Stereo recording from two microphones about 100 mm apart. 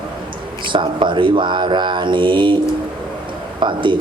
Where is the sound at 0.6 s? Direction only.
55° right (ahead or behind).